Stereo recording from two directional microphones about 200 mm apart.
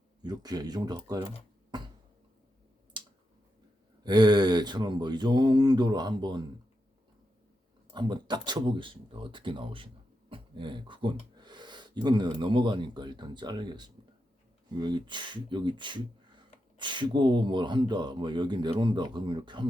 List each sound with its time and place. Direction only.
0.2 s speech: 20° right (ahead or behind)
3.0 s tick-tock: 25° right (ahead or behind)
4.0 s speech: 20° right (ahead or behind)
7.9 s speech: 20° right (ahead or behind)